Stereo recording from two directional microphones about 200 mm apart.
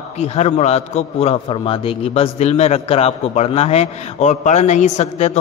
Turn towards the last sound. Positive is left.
turn(degrees=35)  # may be behind; listen again after turning